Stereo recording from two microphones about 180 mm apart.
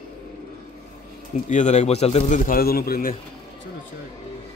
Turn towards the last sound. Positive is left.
turn(degrees=55)  # may be behind; listen again after turning